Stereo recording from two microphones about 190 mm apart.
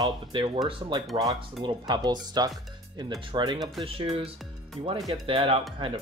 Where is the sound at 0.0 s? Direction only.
25° right (ahead or behind).